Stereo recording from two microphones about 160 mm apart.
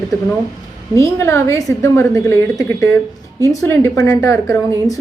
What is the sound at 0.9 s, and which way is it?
A woman's voice, 20° left (ahead or behind).